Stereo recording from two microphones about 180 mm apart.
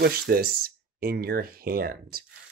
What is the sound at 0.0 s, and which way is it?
Speech, 55° right (ahead or behind).